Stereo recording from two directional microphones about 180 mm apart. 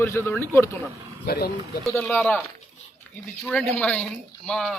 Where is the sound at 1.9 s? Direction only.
10° left (ahead or behind).